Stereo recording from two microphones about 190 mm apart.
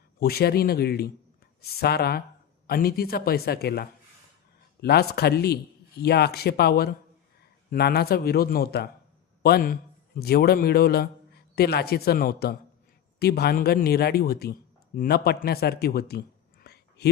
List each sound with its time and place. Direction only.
0.2 s a man's voice: 55° left (ahead or behind)